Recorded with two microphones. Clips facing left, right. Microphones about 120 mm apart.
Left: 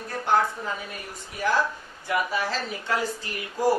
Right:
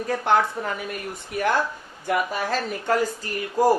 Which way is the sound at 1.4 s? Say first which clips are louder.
Right 2 dB; 60° right (ahead or behind).